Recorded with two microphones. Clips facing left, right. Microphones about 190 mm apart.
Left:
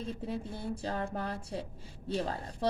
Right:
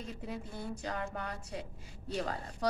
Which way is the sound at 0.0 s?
30° left (ahead or behind).